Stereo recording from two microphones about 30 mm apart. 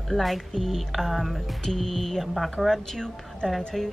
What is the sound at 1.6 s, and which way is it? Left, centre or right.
Speech, centre.